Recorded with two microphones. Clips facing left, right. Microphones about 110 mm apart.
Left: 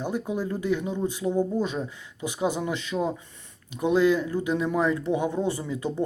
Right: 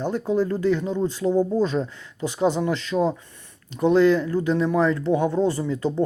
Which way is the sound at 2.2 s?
10° left (ahead or behind).